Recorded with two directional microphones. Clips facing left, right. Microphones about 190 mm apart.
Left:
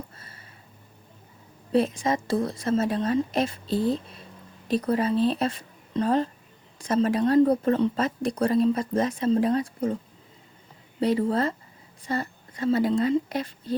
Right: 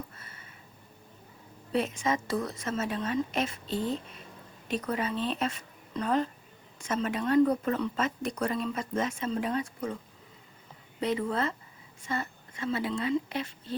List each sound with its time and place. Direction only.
0.2 s a sound: 30° left (ahead or behind)
1.7 s speech: 35° left (ahead or behind)
11.0 s speech: 35° left (ahead or behind)